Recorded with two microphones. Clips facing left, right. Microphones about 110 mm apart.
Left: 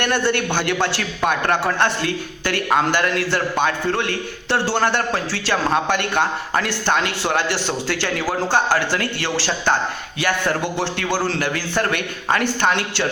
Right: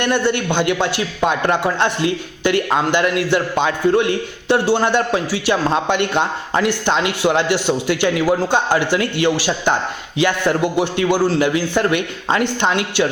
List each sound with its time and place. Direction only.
0.0 s a man's voice: 20° right (ahead or behind)